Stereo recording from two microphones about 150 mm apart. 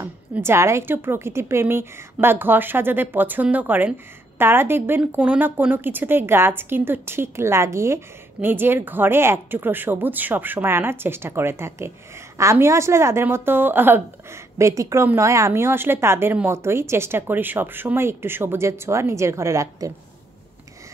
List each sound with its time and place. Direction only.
0.0 s a woman's voice: 15° right (ahead or behind)